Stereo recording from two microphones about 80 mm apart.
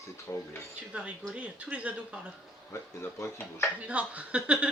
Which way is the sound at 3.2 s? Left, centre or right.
Left.